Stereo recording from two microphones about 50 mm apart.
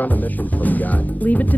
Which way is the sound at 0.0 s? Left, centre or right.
Left.